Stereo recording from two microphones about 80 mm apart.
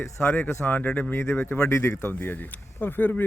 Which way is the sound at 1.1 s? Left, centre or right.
Left.